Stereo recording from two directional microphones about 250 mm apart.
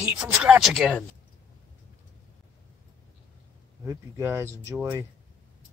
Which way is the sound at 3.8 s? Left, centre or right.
Centre.